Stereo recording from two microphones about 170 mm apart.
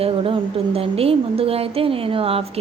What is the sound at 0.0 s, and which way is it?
A woman's voice, 35° right (ahead or behind).